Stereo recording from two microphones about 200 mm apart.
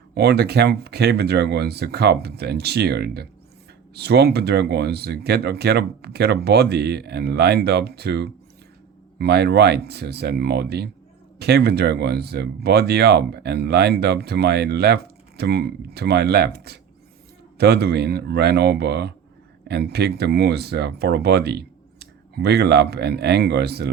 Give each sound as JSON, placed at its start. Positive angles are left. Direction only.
{"t": 0.1, "sound": "speech", "side_deg": -55}